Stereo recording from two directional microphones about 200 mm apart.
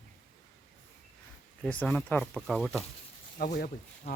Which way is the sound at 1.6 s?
5° left (ahead or behind).